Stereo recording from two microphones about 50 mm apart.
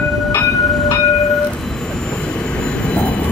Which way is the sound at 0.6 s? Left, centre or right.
Centre.